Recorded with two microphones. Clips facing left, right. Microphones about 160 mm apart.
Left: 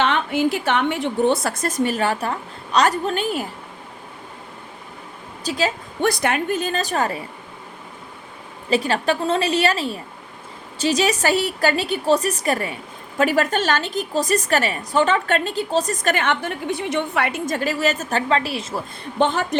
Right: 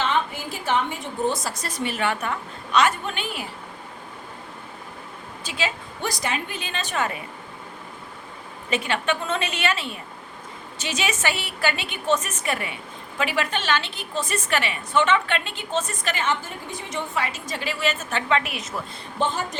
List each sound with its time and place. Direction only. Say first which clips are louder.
0.0 s a woman's voice: left 6 dB; 70° left (ahead or behind); by 3.4 s 40° left (ahead or behind)
5.4 s a woman's voice: left 6 dB; 40° left (ahead or behind)
6.0 s a woman's voice: left 8 dB; 60° left (ahead or behind); by 7.2 s 35° left (ahead or behind)
8.7 s a woman's voice: left 5 dB; 35° left (ahead or behind)
16.1 s a woman's voice: left 4 dB; 65° left (ahead or behind); by 18.8 s 30° left (ahead or behind)
19.2 s a woman's voice: left 6 dB; 70° left (ahead or behind)